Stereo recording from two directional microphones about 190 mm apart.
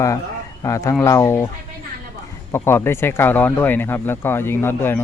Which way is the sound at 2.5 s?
10° left (ahead or behind).